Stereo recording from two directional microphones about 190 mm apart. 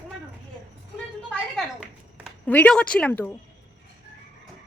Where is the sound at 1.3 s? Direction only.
5° left (ahead or behind).